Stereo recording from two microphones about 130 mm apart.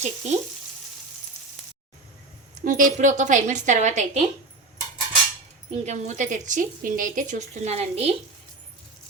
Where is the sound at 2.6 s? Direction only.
90° right; by 4.2 s 70° right (ahead or behind).